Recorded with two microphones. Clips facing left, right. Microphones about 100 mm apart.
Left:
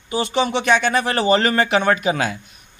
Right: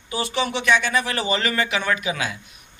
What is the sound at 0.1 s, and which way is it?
Speech, 30° left (ahead or behind).